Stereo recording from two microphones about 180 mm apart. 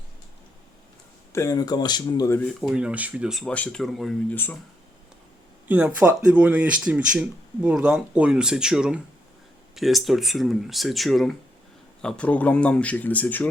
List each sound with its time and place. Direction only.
1.3 s speech: 15° left (ahead or behind)
2.4 s speech: centre (ahead or behind)
5.6 s speech: 10° right (ahead or behind); by 13.5 s 10° left (ahead or behind)